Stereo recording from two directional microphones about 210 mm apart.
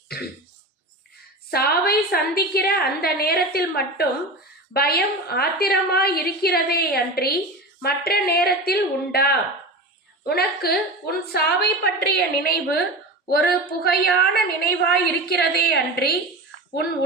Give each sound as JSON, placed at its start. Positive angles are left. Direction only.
{"t": 1.5, "sound": "a woman's voice", "side_deg": 45}